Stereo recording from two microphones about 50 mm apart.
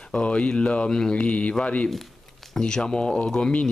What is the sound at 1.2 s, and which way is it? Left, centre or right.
Speech, left.